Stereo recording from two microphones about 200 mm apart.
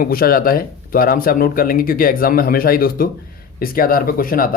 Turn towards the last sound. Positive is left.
turn(degrees=45)  # may be behind; listen again after turning